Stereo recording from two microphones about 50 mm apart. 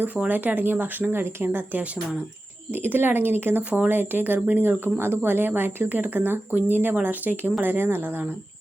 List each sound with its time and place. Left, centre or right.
0.3 s speech: right
3.6 s speech: right
3.8 s speech: right